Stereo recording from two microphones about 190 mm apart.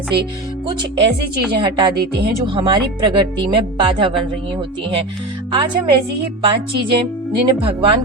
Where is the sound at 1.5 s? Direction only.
25° right (ahead or behind).